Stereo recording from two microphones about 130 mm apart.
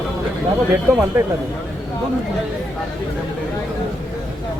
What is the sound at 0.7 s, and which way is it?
Speech, 15° right (ahead or behind).